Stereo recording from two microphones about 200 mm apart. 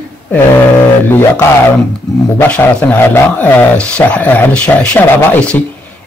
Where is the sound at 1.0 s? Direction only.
10° left (ahead or behind).